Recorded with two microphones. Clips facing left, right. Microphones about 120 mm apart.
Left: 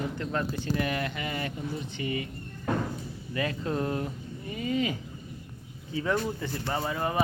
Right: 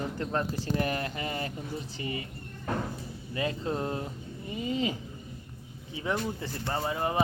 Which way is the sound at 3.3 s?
25° right (ahead or behind).